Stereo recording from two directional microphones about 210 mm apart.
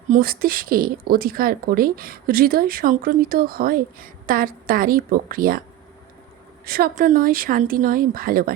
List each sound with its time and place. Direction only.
0.1 s speech: 45° right (ahead or behind)
6.7 s speech: 45° right (ahead or behind)